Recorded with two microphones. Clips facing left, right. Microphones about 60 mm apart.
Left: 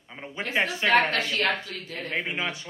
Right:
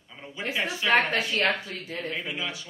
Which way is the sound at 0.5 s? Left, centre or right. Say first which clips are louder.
Left 4 dB; left.